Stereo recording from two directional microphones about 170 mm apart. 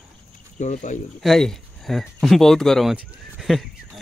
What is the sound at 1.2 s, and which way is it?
Speech, centre (ahead or behind).